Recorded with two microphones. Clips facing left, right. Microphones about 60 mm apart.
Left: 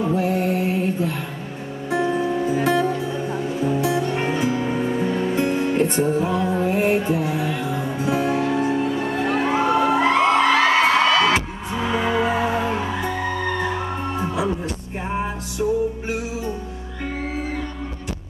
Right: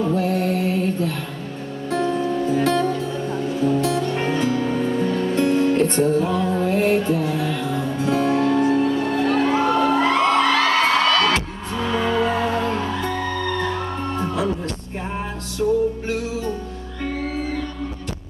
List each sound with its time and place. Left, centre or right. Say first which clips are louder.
0.0 s music: even; centre
15.6 s music: right 2 dB; left